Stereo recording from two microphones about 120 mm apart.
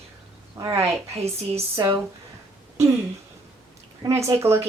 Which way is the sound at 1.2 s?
60° right (ahead or behind).